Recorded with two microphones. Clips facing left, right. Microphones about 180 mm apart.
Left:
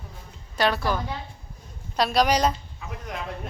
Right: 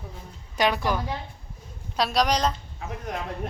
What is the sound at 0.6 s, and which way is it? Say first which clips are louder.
Speech: even; 15° right (ahead or behind).